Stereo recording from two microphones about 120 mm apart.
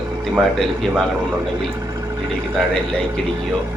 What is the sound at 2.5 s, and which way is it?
Speech, 5° left (ahead or behind).